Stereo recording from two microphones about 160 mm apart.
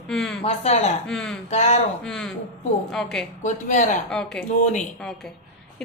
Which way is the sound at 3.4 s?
50° left (ahead or behind).